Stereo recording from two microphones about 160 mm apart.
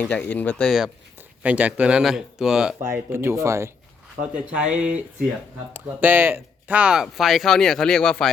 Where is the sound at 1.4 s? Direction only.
10° right (ahead or behind).